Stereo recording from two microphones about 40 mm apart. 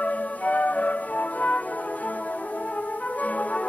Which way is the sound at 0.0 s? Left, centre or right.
Left.